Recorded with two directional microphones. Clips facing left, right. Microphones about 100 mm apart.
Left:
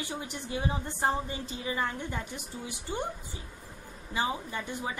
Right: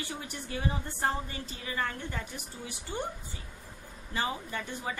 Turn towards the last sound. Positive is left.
turn(degrees=15)  # may be behind; listen again after turning